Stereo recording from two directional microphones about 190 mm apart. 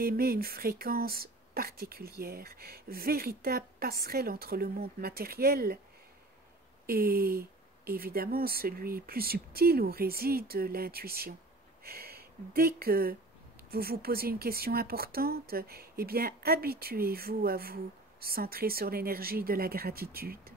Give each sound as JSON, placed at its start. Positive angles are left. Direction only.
{"t": 0.0, "sound": "speech", "side_deg": -50}
{"t": 6.9, "sound": "speech", "side_deg": -50}